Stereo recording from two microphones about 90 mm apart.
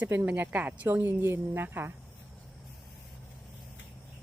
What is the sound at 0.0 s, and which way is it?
Speech, 20° right (ahead or behind).